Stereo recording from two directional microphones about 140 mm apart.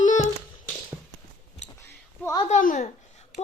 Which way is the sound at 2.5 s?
70° left (ahead or behind).